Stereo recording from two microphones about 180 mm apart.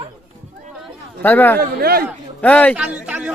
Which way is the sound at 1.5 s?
55° right (ahead or behind).